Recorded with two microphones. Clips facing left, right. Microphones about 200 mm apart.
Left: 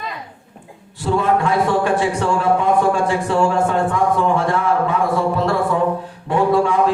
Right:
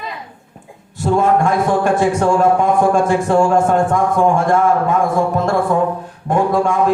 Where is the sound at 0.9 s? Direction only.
45° right (ahead or behind).